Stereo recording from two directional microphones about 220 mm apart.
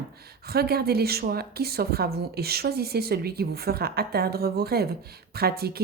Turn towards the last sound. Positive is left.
turn(degrees=-45)  # may be behind; listen again after turning